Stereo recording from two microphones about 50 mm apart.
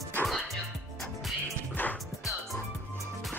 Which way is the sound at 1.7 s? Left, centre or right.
Left.